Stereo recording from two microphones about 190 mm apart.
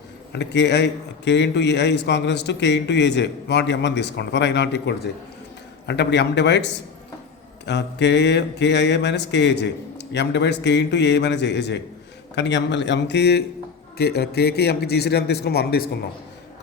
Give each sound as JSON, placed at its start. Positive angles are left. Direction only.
{"t": 0.3, "sound": "a man's voice", "side_deg": 65}